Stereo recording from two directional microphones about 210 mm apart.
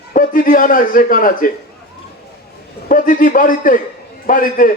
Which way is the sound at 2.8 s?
40° left (ahead or behind).